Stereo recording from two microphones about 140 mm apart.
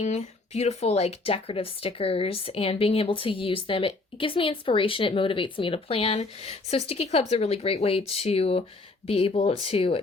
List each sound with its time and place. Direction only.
0.0 s speech: 50° left (ahead or behind)